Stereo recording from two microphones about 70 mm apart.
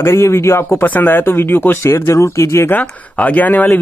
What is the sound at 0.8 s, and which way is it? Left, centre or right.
Speech, left.